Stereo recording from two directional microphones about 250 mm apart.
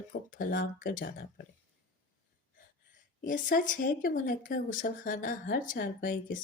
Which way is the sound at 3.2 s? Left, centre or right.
Left.